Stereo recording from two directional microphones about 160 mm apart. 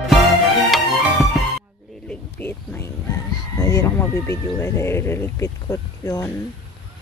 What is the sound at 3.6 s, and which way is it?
Speech, 20° left (ahead or behind).